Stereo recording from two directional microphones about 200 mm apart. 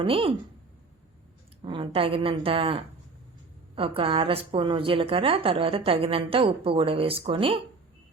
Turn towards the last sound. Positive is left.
turn(degrees=-25)  # may be behind; listen again after turning